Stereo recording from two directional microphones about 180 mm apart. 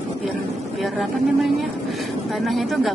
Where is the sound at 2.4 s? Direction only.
Centre (ahead or behind).